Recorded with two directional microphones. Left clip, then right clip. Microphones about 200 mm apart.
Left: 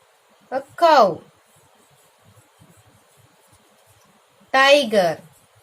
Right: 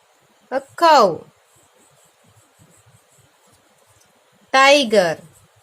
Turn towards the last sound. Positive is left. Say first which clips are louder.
# right 2 dB
turn(degrees=-50)  # may be behind; listen again after turning